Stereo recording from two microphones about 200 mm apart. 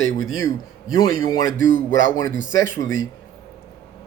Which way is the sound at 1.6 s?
75° left (ahead or behind).